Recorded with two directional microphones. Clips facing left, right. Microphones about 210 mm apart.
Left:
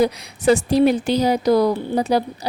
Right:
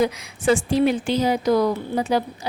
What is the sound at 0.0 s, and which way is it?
A woman's voice, 40° left (ahead or behind).